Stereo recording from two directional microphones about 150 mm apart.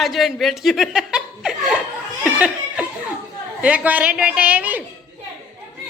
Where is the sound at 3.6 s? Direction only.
10° right (ahead or behind).